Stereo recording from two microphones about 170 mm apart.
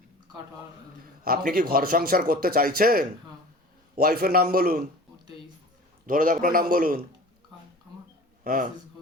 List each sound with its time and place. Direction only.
1.2 s a man's voice: 60° right (ahead or behind)
6.1 s a man's voice: 55° right (ahead or behind)
8.4 s a man's voice: 55° right (ahead or behind)